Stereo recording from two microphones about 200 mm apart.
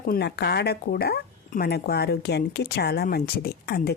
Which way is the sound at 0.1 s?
55° left (ahead or behind).